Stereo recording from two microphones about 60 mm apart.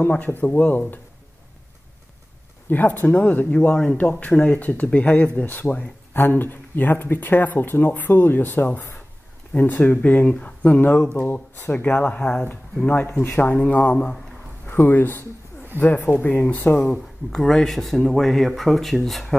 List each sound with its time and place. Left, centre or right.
0.0 s speech: left
2.7 s speech: left
3.7 s speech: centre; by 15.2 s left
15.7 s speech: right
16.2 s speech: left
16.7 s speech: centre